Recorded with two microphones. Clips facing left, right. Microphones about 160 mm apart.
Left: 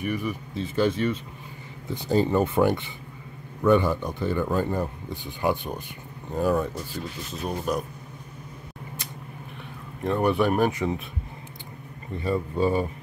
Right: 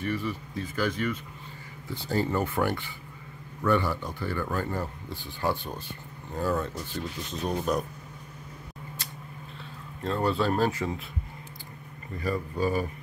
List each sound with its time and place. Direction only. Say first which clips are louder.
0.0 s speech: left 2 dB; 15° left (ahead or behind)
10.0 s speech: left 4 dB; 15° left (ahead or behind)
12.2 s speech: left 4 dB; 25° left (ahead or behind)